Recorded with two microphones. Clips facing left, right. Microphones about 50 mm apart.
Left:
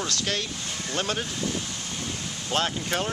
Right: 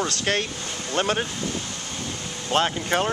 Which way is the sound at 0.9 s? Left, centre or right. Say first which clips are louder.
Right 5 dB; right.